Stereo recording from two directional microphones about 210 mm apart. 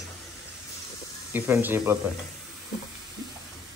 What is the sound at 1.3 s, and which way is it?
Speech, 10° right (ahead or behind).